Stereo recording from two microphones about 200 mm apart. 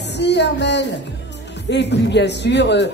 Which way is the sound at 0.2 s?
60° left (ahead or behind).